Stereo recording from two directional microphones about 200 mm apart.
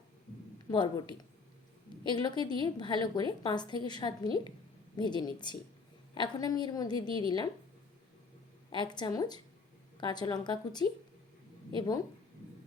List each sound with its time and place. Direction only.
0.7 s a woman's voice: 20° left (ahead or behind)
8.7 s a woman's voice: 20° left (ahead or behind)